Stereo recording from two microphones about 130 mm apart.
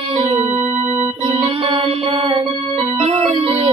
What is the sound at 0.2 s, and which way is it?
Music, 45° right (ahead or behind).